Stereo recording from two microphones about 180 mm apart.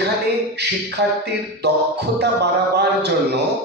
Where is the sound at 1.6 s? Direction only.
65° right (ahead or behind).